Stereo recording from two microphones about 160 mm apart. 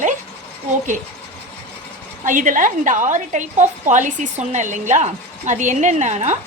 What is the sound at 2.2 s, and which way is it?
A woman's voice, 55° right (ahead or behind).